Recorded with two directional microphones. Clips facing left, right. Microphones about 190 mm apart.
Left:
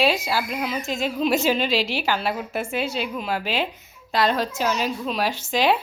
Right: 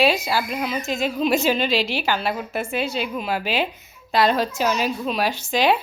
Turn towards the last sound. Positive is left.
turn(degrees=0)  # may be behind; listen again after turning